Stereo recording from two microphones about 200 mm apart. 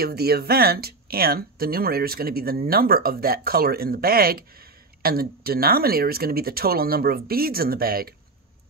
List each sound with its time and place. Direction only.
0.0 s speech: 50° right (ahead or behind)